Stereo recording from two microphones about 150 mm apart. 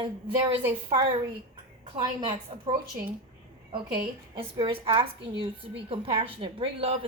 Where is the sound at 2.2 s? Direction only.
35° right (ahead or behind).